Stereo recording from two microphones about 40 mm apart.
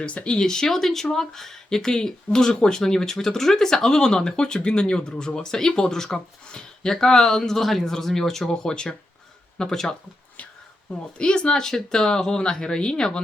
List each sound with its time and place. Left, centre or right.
0.0 s speech: left
0.3 s speech: centre
11.2 s speech: left